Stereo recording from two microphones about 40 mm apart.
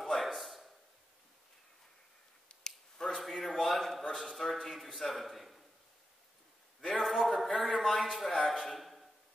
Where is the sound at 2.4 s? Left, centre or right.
Centre.